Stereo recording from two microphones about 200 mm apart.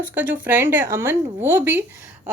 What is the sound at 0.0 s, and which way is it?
A woman's voice, 10° right (ahead or behind).